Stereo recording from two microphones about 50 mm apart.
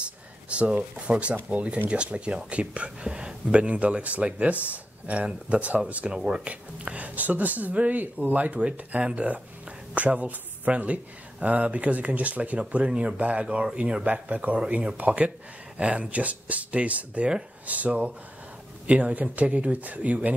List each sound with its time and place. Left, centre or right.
0.0 s speech: right
6.1 s speech: centre
6.5 s speech: right